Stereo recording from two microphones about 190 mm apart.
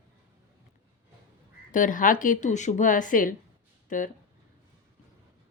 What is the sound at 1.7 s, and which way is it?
Speech, 45° left (ahead or behind).